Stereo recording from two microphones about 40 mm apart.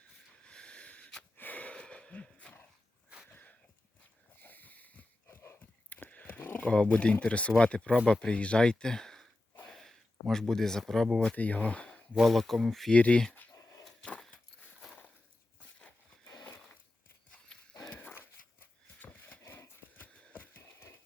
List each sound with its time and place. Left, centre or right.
0.4 s snort: left
1.4 s wheeze: left
1.7 s a sound: left
3.2 s a sound: left
6.7 s speech: left; by 11.3 s centre
11.3 s speech: left
12.2 s speech: centre
12.9 s speech: left
17.5 s horse: centre
17.8 s dog: left
18.1 s dog: left
19.5 s horse: left
20.3 s a sound: left
20.6 s a sound: left